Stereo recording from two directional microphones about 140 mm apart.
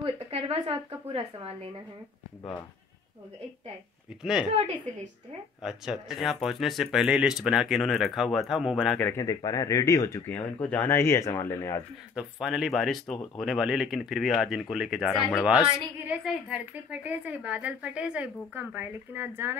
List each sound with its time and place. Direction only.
0.0 s a woman's voice: 45° right (ahead or behind)
4.2 s speech: 5° right (ahead or behind)
5.6 s speech: 5° right (ahead or behind)
8.9 s speech: 15° left (ahead or behind)
9.2 s speech: 25° left (ahead or behind)
12.2 s speech: 5° right (ahead or behind)